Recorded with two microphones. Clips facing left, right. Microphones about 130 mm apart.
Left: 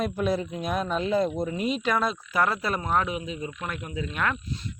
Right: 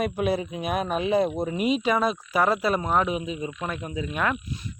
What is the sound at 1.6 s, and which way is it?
Speech, 15° right (ahead or behind).